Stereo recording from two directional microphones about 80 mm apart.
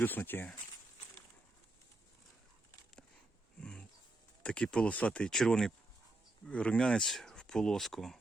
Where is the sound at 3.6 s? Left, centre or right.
Centre.